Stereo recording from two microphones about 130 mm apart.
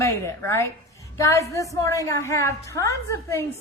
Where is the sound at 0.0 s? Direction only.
25° left (ahead or behind).